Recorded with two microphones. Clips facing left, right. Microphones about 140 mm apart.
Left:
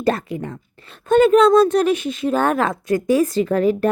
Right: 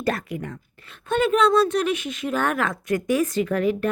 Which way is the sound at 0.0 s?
25° left (ahead or behind).